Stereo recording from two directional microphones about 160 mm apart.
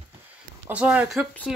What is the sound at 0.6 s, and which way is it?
Speech, 5° right (ahead or behind).